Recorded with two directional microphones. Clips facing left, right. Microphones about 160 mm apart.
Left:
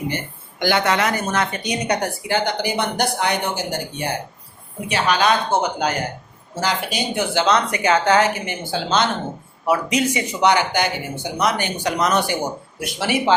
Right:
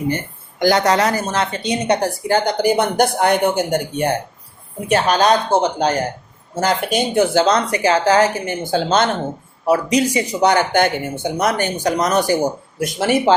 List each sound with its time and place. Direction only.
0.6 s a woman's voice: 40° right (ahead or behind)
2.2 s speech: 45° right (ahead or behind)
6.6 s speech: 50° right (ahead or behind)
9.6 s speech: 35° right (ahead or behind)